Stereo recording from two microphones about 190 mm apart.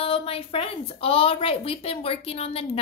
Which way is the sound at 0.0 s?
30° left (ahead or behind).